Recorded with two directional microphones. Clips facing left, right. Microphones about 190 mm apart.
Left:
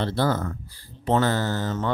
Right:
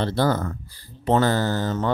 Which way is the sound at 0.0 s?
40° right (ahead or behind).